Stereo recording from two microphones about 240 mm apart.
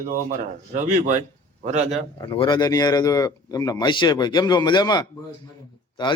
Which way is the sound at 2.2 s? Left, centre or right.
Left.